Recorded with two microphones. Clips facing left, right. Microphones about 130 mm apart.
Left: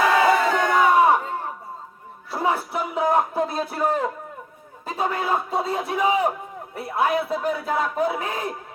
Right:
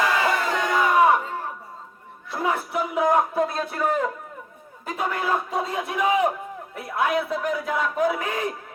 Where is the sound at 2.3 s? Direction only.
30° left (ahead or behind).